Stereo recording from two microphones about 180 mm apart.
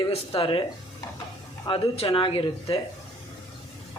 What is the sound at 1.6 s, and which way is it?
Speech, 30° left (ahead or behind).